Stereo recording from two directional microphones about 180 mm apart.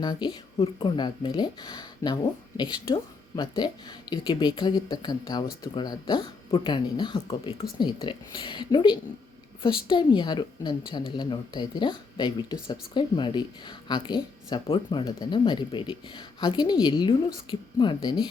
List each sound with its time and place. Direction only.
0.0 s speech: 25° left (ahead or behind)